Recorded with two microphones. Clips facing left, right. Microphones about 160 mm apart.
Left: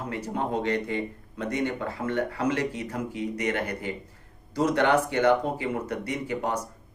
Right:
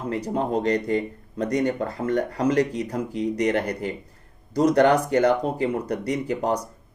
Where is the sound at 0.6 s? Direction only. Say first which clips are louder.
Right 6 dB; 40° right (ahead or behind).